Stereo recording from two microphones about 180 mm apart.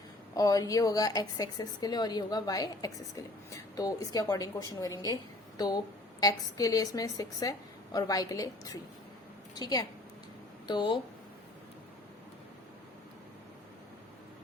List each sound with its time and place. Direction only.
0.3 s a woman's voice: 20° left (ahead or behind)